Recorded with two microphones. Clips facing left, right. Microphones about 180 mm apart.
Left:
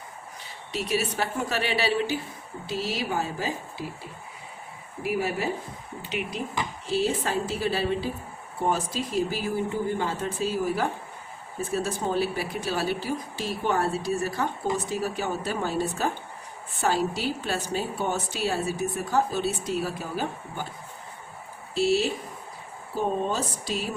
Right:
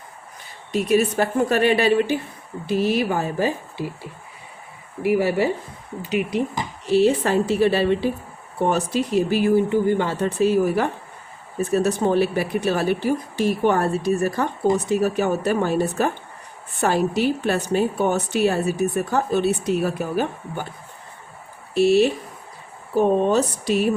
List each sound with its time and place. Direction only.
0.7 s a woman's voice: 50° right (ahead or behind)
5.0 s speech: 70° right (ahead or behind)
6.0 s speech: 40° right (ahead or behind)
6.8 s a woman's voice: 70° right (ahead or behind)
21.8 s a woman's voice: 60° right (ahead or behind)